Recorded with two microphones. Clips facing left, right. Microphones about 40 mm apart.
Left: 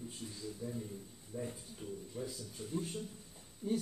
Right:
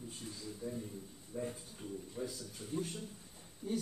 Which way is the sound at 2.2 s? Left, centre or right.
Centre.